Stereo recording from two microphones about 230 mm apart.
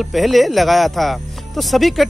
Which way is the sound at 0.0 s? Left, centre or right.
Centre.